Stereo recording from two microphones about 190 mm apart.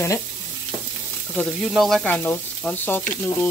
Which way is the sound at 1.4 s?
Centre (ahead or behind).